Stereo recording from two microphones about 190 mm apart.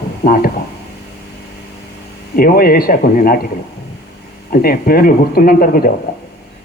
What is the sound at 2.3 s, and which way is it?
A man's voice, 50° left (ahead or behind).